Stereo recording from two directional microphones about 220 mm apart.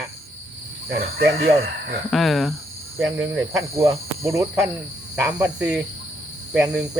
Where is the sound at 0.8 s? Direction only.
45° right (ahead or behind).